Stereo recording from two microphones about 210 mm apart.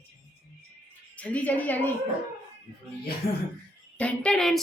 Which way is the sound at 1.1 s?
5° left (ahead or behind).